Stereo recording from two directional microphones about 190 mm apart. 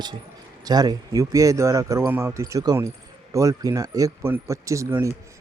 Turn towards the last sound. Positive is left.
turn(degrees=-15)  # may be behind; listen again after turning